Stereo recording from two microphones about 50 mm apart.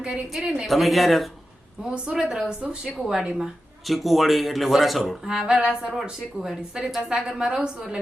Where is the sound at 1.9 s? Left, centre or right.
Centre.